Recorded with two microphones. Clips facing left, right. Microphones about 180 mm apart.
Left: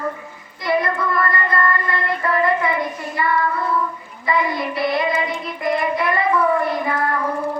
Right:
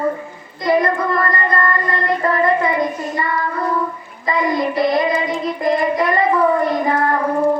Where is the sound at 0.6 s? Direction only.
45° right (ahead or behind).